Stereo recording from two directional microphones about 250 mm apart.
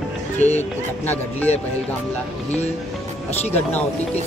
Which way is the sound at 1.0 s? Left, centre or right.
Centre.